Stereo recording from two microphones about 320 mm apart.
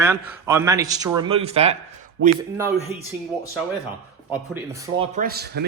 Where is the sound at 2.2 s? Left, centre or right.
Right.